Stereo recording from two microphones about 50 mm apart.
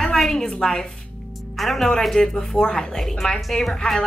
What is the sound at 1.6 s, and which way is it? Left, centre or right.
Speech, centre.